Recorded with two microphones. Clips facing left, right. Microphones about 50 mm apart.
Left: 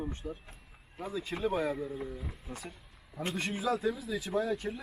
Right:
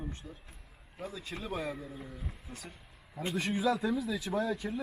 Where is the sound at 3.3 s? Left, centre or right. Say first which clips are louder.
Right 3 dB; centre.